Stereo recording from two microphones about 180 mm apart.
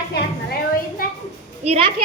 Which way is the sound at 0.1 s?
55° left (ahead or behind).